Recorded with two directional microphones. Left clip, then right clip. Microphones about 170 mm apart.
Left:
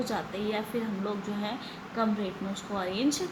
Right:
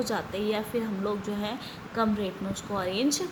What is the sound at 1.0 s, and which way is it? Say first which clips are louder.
A woman's voice: right 3 dB; 55° right (ahead or behind).